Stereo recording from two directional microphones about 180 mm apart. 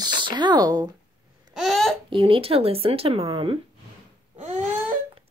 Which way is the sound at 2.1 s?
30° right (ahead or behind).